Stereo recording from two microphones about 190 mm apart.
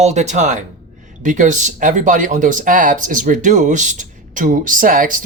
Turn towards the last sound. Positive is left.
turn(degrees=-45)  # may be behind; listen again after turning